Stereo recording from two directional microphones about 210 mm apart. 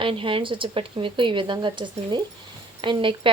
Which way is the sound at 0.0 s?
25° right (ahead or behind).